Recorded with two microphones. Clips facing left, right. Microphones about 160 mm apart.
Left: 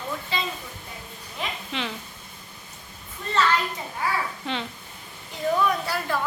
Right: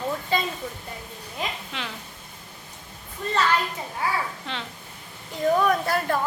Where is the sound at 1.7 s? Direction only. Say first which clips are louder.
Left 4 dB; centre (ahead or behind).